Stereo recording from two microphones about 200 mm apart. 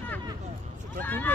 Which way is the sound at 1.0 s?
10° left (ahead or behind).